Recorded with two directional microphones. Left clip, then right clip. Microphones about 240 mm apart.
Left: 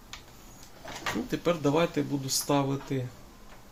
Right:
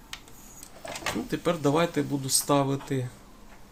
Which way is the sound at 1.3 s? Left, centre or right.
Centre.